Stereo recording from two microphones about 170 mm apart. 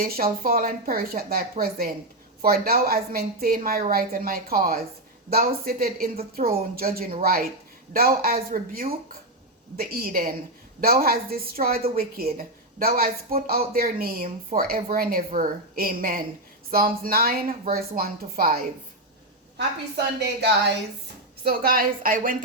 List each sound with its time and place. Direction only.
0.0 s speech: 60° right (ahead or behind)
20.1 s speech: 85° right
21.4 s speech: 60° right (ahead or behind)